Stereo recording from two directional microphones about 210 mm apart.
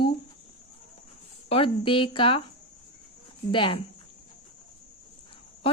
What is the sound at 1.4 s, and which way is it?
Speech, 25° left (ahead or behind).